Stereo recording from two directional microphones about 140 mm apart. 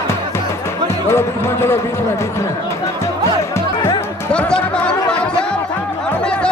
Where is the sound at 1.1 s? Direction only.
15° left (ahead or behind).